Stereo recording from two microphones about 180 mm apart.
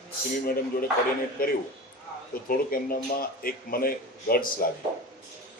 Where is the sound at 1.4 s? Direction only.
55° left (ahead or behind).